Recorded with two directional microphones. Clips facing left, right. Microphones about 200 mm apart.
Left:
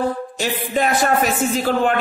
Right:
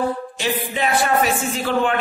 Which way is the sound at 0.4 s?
45° left (ahead or behind).